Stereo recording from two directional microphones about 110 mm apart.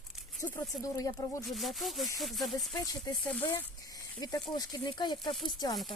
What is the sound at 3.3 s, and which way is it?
Speech, 15° left (ahead or behind).